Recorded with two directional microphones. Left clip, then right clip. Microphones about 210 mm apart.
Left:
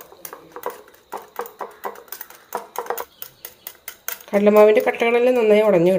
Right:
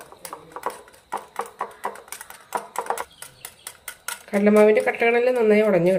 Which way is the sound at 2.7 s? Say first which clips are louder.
Left 1 dB; 5° right (ahead or behind).